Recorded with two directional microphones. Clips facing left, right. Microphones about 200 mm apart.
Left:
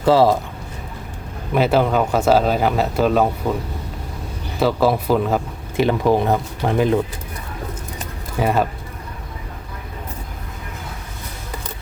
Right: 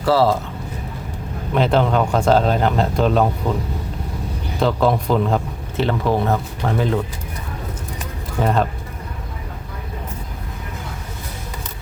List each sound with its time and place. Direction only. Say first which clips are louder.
0.0 s a man's voice: left 2 dB; 15° left (ahead or behind)
1.5 s a man's voice: left 1 dB; 5° left (ahead or behind)
4.6 s a man's voice: left 1 dB; 5° left (ahead or behind)
8.4 s a man's voice: even; 10° left (ahead or behind)